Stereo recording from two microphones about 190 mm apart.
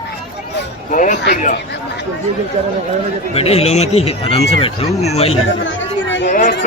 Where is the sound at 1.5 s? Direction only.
65° left (ahead or behind).